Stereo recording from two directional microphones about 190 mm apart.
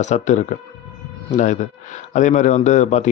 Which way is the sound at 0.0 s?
40° left (ahead or behind).